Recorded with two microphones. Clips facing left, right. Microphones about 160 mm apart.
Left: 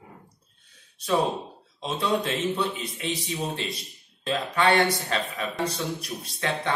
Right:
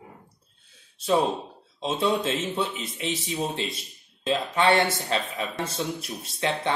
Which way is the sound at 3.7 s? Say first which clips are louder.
Left 1 dB; 25° right (ahead or behind).